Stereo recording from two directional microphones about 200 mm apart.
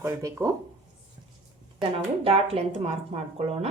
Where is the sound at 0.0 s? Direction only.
15° right (ahead or behind).